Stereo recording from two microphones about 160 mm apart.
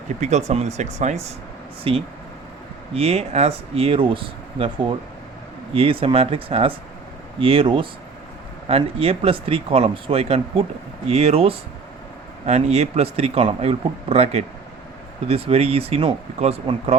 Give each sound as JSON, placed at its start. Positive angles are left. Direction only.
{"t": 0.2, "sound": "speech", "side_deg": -45}